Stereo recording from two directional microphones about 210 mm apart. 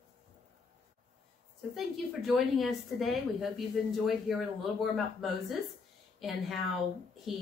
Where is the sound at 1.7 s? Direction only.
Centre (ahead or behind).